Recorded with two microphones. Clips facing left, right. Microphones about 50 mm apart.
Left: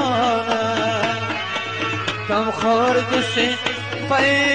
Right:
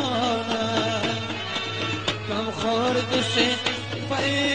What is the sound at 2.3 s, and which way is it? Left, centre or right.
Music, left.